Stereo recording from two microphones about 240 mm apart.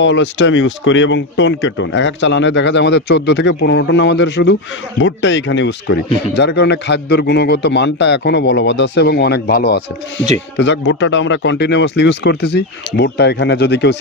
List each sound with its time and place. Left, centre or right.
0.0 s speech: left